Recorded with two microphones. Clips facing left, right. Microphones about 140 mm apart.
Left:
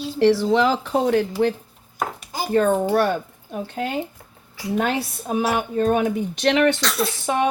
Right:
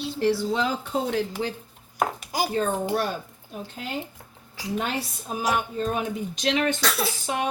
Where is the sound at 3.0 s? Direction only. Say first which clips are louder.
Left 8 dB; 60° left (ahead or behind).